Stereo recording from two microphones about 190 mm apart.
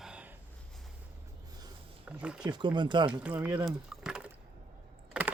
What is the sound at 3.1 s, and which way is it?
Speech, 5° right (ahead or behind).